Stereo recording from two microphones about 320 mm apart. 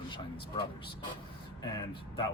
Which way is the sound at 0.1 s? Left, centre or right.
Centre.